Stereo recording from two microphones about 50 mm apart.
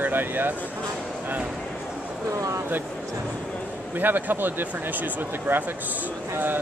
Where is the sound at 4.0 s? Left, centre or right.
Right.